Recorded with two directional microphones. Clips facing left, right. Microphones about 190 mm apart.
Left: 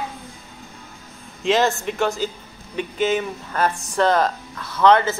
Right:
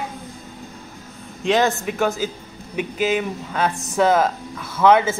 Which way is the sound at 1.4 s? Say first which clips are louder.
Even; centre (ahead or behind).